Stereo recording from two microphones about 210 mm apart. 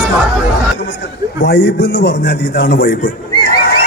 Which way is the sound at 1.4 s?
55° left (ahead or behind).